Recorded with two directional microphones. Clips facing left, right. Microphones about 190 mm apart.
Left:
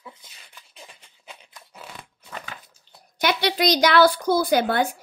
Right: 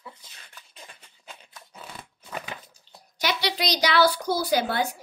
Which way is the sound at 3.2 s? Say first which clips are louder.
Left 5 dB; 55° left (ahead or behind).